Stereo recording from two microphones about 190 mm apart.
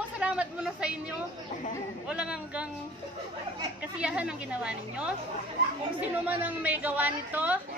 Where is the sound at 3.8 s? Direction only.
5° right (ahead or behind).